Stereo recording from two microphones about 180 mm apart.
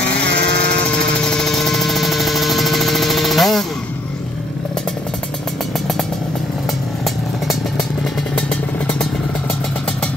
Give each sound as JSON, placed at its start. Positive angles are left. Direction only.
{"t": 0.2, "sound": "vehicle", "side_deg": -70}
{"t": 0.8, "sound": "hum", "side_deg": 5}
{"t": 8.4, "sound": "vehicle", "side_deg": 5}